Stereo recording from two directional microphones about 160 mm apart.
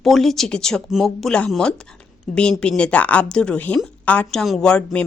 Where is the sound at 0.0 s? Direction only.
Centre (ahead or behind).